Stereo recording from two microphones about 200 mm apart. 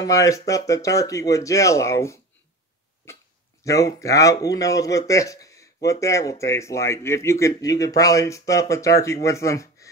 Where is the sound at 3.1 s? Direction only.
15° left (ahead or behind).